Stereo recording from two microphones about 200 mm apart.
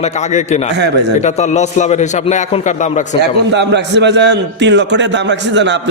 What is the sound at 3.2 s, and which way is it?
A man's voice, 60° right (ahead or behind).